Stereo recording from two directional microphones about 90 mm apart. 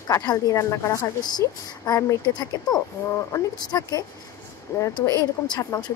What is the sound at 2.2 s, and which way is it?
A woman's voice, 50° left (ahead or behind).